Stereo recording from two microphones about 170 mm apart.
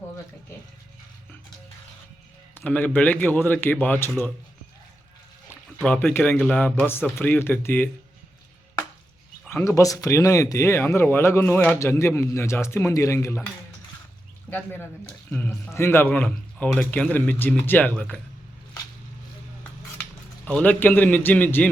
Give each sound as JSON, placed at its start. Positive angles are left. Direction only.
{"t": 2.6, "sound": "speech", "side_deg": 10}
{"t": 5.5, "sound": "a sound", "side_deg": 10}
{"t": 6.3, "sound": "speech", "side_deg": 10}
{"t": 9.5, "sound": "speech", "side_deg": 15}
{"t": 14.5, "sound": "speech", "side_deg": 10}
{"t": 20.4, "sound": "speech", "side_deg": 10}